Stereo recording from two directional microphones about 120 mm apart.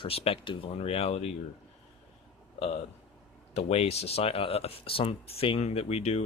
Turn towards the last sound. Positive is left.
turn(degrees=60)  # may be behind; listen again after turning